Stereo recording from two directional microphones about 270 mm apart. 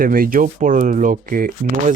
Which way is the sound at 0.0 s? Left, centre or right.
Right.